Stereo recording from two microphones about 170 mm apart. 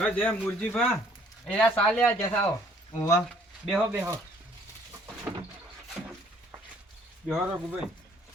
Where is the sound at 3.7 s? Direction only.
5° right (ahead or behind).